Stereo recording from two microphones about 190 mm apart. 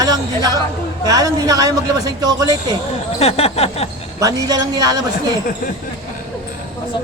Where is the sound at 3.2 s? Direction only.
30° left (ahead or behind).